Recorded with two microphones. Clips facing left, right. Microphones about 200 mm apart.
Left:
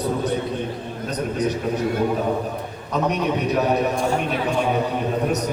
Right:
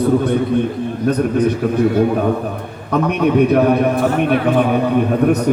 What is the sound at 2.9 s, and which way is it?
A man's voice, 55° right (ahead or behind).